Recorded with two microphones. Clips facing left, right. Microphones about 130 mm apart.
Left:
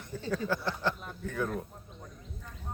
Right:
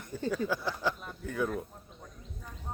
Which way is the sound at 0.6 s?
5° right (ahead or behind).